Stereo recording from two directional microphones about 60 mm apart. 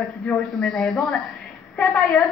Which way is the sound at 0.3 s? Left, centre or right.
Centre.